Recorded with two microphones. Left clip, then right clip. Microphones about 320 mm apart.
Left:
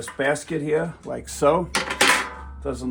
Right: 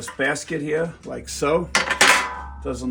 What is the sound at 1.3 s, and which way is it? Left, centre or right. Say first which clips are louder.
Dishes: left 1 dB; centre.